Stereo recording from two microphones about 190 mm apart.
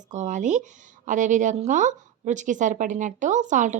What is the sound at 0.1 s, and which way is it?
A woman's voice, 40° right (ahead or behind).